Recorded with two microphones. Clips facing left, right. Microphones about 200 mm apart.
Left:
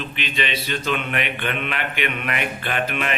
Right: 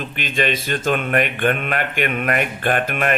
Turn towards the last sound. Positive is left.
turn(degrees=-50)  # may be behind; listen again after turning